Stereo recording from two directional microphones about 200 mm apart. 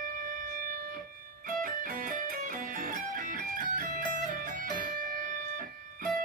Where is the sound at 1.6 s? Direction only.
40° right (ahead or behind).